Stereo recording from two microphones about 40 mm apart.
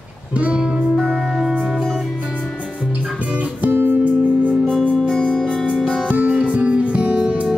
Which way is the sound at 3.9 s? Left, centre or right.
Right.